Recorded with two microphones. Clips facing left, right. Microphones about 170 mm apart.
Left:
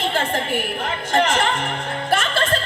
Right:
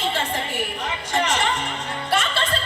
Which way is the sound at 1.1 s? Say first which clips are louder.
Left 4 dB; 55° left (ahead or behind).